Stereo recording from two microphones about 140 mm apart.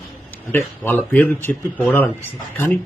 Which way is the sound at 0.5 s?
15° left (ahead or behind).